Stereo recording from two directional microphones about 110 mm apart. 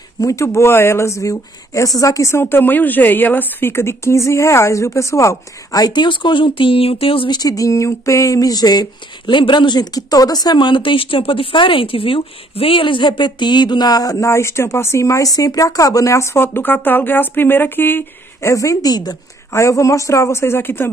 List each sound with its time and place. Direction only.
0.2 s speech: 30° left (ahead or behind); by 7.3 s 55° left (ahead or behind)
7.3 s speech: 35° left (ahead or behind)